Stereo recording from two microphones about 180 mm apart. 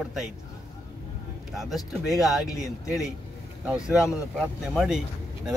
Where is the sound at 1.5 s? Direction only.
Centre (ahead or behind).